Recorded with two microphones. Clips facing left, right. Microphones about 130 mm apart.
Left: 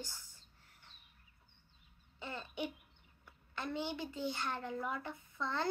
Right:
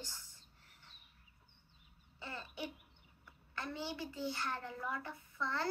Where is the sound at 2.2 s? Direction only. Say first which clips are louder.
Left 3 dB; 20° left (ahead or behind).